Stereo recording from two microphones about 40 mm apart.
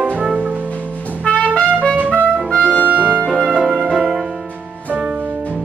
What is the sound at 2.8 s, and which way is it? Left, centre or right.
Music, right.